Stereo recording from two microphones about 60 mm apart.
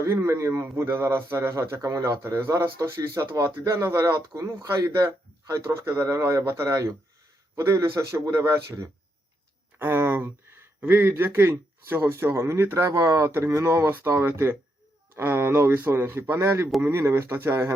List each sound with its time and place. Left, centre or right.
0.0 s speech: right
0.6 s speech: right
1.8 s a man's voice: right
4.4 s a man's voice: right
5.5 s a man's voice: right
9.7 s a sound: right
10.8 s speech: right
12.9 s a man's voice: right